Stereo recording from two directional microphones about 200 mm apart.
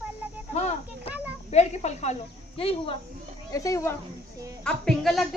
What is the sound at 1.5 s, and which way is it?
Speech, 35° left (ahead or behind).